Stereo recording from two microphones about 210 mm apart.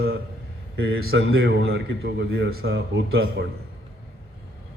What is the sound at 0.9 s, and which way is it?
A man's voice, 55° right (ahead or behind).